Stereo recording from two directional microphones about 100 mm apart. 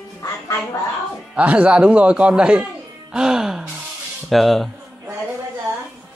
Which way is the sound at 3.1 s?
5° right (ahead or behind).